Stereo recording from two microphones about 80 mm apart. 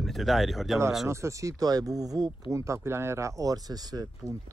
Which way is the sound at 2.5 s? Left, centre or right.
Right.